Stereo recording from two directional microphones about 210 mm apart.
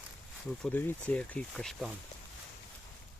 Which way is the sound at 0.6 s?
10° left (ahead or behind).